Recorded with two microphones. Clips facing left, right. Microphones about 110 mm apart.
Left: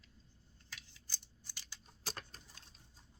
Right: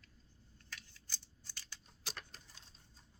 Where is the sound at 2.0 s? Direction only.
40° left (ahead or behind).